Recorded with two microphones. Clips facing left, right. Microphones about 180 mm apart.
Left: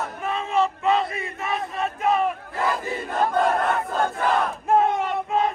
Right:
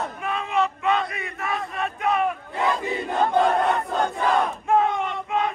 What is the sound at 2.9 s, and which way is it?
Crowd, centre (ahead or behind).